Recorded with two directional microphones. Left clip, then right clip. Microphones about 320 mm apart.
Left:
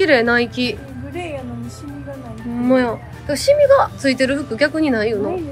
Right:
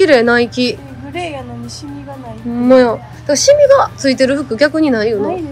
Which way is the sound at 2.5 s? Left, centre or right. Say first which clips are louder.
Right 8 dB; centre.